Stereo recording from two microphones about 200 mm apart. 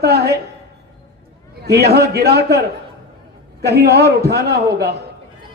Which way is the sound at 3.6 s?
55° right (ahead or behind).